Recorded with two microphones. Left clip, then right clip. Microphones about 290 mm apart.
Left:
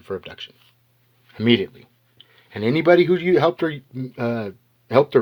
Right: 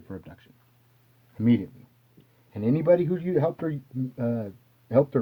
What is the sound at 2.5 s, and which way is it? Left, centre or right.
Speech, centre.